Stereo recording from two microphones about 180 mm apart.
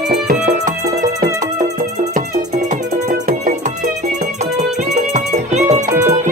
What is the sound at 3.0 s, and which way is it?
Music, 45° right (ahead or behind).